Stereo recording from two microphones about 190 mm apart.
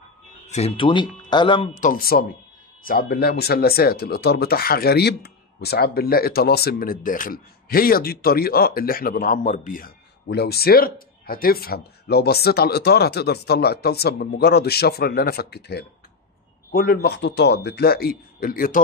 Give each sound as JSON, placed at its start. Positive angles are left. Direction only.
{"t": 0.5, "sound": "speech", "side_deg": 35}
{"t": 1.8, "sound": "a man's voice", "side_deg": 45}